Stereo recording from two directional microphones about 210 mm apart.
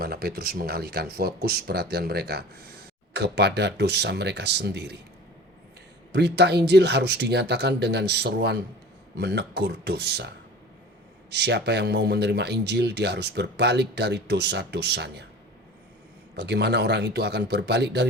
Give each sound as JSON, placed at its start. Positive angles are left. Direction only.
{"t": 0.0, "sound": "speech", "side_deg": -50}
{"t": 6.1, "sound": "speech", "side_deg": -50}
{"t": 16.4, "sound": "speech", "side_deg": -55}